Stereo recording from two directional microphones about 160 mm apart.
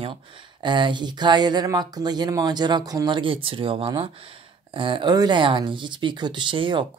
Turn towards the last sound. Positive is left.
turn(degrees=-30)  # may be behind; listen again after turning